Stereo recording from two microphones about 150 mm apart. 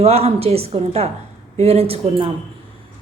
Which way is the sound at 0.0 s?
45° right (ahead or behind).